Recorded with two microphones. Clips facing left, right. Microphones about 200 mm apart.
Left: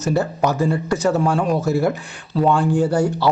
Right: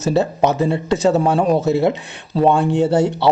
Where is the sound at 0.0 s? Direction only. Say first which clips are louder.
Right 3 dB; 25° right (ahead or behind).